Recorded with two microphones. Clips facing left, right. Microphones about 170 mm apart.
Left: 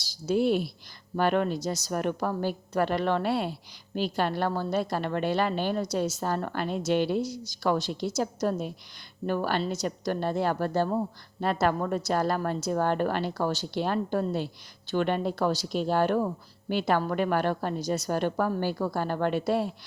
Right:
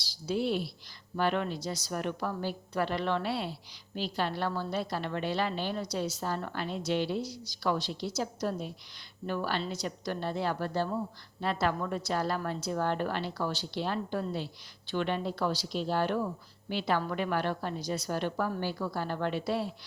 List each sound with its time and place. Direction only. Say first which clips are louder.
0.1 s a woman's voice: left 6 dB; 50° left (ahead or behind)